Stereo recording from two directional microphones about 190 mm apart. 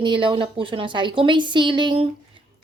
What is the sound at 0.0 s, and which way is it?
Speech, 25° right (ahead or behind).